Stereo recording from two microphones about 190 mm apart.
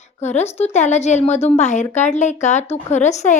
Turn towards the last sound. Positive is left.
turn(degrees=40)  # may be behind; listen again after turning